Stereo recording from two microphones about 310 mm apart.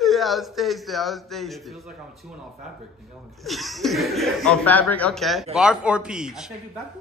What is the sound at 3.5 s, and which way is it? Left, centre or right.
A man's voice, centre.